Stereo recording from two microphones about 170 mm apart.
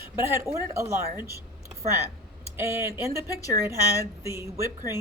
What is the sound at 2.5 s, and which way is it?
Speech, 15° right (ahead or behind).